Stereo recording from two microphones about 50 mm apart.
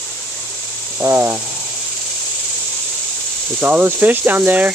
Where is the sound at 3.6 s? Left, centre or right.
Right.